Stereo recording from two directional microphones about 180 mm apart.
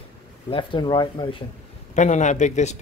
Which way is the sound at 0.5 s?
30° left (ahead or behind).